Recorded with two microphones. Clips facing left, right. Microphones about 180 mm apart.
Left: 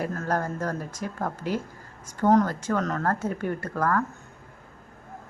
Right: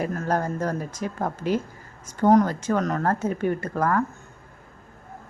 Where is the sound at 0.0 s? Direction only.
15° right (ahead or behind).